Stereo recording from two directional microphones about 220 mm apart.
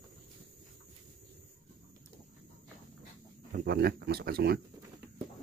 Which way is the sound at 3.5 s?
45° right (ahead or behind).